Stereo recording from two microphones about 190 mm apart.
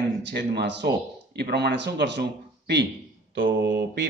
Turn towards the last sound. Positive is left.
turn(degrees=-65)  # may be behind; listen again after turning